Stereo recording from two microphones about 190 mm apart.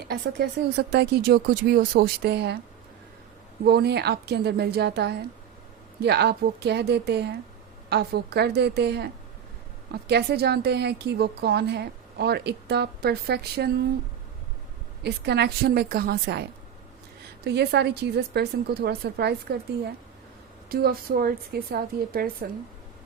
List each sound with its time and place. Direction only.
0.1 s a woman's voice: 60° right (ahead or behind)
3.7 s a woman's voice: 60° right (ahead or behind)
15.0 s a woman's voice: 60° right (ahead or behind)
20.7 s a woman's voice: 55° right (ahead or behind)